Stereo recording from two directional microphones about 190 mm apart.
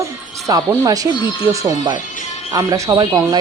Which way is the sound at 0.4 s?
15° right (ahead or behind).